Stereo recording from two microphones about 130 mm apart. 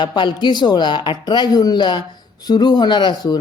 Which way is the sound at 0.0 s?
35° left (ahead or behind).